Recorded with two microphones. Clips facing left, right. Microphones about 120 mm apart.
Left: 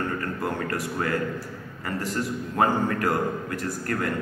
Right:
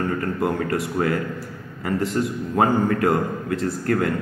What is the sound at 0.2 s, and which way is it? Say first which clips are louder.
A man's voice: right 5 dB; 20° right (ahead or behind).